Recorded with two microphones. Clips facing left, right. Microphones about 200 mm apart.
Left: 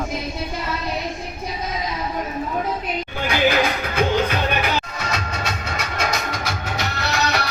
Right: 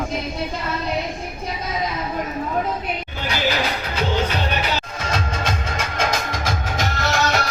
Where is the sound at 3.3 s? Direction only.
55° left (ahead or behind).